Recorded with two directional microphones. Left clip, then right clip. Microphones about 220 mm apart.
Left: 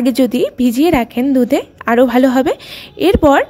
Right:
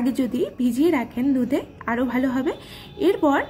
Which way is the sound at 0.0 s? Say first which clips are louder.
Left 10 dB; 45° left (ahead or behind).